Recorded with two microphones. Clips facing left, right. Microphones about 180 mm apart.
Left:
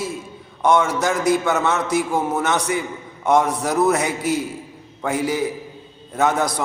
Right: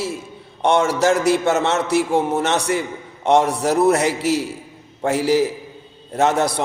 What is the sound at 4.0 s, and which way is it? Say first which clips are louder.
A man's voice: right 3 dB; 75° right (ahead or behind).